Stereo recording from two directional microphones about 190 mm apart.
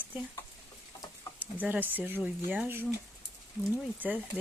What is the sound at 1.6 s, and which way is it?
Speech, 10° right (ahead or behind).